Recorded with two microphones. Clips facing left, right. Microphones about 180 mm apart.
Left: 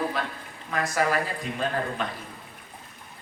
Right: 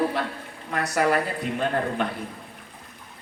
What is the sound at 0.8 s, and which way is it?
Speech, 70° right (ahead or behind).